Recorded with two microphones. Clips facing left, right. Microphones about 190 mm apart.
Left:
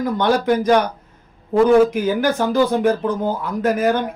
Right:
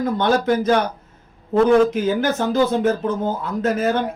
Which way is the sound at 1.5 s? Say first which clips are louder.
Left 1 dB; 10° left (ahead or behind).